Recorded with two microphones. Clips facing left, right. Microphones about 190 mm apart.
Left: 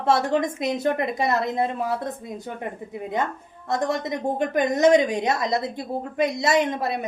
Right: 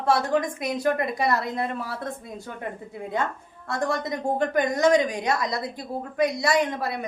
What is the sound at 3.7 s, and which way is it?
A woman's voice, 20° left (ahead or behind).